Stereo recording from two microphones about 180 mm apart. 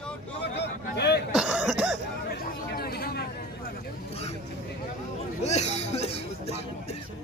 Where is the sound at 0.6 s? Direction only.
65° left (ahead or behind).